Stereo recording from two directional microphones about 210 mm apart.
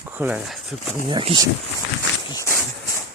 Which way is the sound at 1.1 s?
25° right (ahead or behind).